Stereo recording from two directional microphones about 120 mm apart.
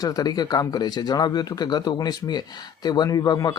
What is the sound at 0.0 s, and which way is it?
Speech, 30° left (ahead or behind).